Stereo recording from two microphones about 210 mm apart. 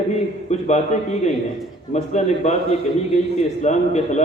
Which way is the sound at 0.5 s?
35° left (ahead or behind).